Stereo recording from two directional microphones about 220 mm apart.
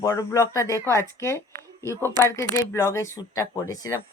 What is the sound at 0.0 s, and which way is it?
Speech, 15° left (ahead or behind).